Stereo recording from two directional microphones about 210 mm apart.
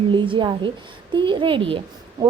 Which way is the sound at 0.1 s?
25° right (ahead or behind).